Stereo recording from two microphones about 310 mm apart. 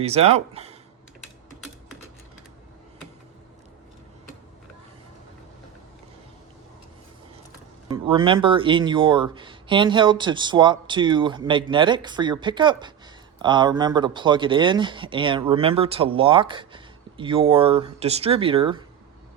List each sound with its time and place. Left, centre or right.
0.0 s speech: centre
7.9 s speech: centre